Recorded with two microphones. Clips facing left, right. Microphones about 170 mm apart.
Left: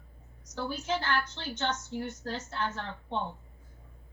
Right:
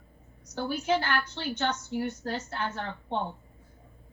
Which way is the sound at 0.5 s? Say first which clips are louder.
Right 5 dB; 60° right (ahead or behind).